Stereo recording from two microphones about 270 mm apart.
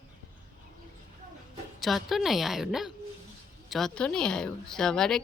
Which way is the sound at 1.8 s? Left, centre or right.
Centre.